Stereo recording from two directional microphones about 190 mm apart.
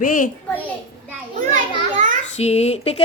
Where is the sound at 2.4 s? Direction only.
35° left (ahead or behind).